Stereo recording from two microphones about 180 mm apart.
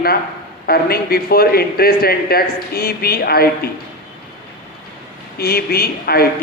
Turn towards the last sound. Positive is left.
turn(degrees=60)  # may be behind; listen again after turning